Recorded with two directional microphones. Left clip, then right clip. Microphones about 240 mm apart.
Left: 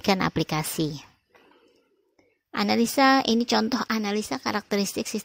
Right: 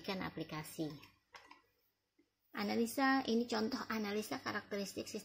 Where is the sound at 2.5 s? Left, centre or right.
Left.